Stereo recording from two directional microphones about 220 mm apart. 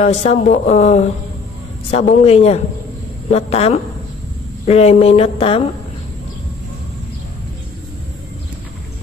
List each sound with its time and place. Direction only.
0.0 s speech: 30° left (ahead or behind)